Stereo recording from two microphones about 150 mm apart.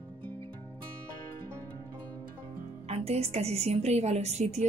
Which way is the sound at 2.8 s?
45° right (ahead or behind).